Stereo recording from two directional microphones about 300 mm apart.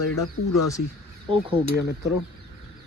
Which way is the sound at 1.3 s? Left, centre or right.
Centre.